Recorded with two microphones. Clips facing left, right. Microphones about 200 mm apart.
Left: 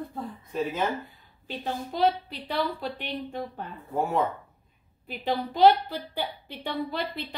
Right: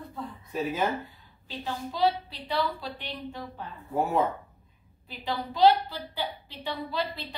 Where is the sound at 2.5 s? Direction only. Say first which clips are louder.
Left 1 dB; 55° left (ahead or behind).